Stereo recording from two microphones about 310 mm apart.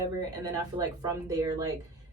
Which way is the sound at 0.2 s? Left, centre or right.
Centre.